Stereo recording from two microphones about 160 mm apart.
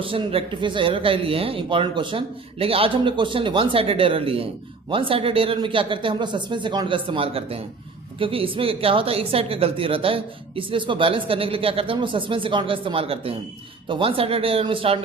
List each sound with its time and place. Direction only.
0.0 s speech: 35° right (ahead or behind)